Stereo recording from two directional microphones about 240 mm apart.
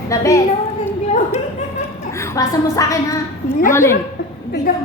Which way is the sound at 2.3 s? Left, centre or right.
Centre.